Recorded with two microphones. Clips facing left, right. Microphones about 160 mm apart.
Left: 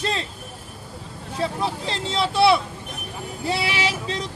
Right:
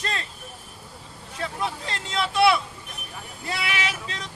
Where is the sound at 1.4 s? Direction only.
30° left (ahead or behind).